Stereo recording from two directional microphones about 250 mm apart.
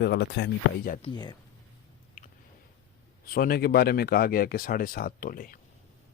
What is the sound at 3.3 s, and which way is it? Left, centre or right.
Speech, left.